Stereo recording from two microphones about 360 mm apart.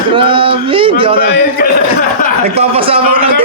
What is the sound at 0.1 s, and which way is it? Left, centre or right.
Speech, centre.